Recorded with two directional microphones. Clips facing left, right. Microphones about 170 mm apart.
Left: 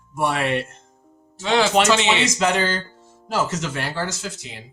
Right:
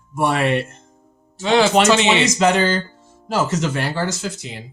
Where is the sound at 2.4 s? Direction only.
30° right (ahead or behind).